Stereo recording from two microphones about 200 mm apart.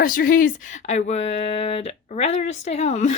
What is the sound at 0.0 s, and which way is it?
Speech, 45° left (ahead or behind).